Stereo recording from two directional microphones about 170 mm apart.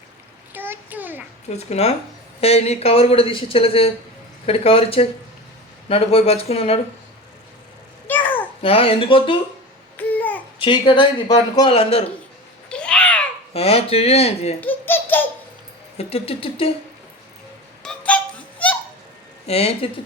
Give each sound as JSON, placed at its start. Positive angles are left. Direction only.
{"t": 0.5, "sound": "a child's voice", "side_deg": -10}
{"t": 1.5, "sound": "speech", "side_deg": 40}
{"t": 8.0, "sound": "babbling", "side_deg": 10}
{"t": 8.6, "sound": "speech", "side_deg": 35}
{"t": 10.0, "sound": "babbling", "side_deg": 10}
{"t": 10.6, "sound": "a man's voice", "side_deg": 30}
{"t": 12.6, "sound": "babbling", "side_deg": 5}
{"t": 13.5, "sound": "speech", "side_deg": 35}
{"t": 14.6, "sound": "a sound", "side_deg": 10}
{"t": 16.0, "sound": "speech", "side_deg": 35}
{"t": 17.8, "sound": "a sound", "side_deg": 5}
{"t": 19.5, "sound": "speech", "side_deg": 35}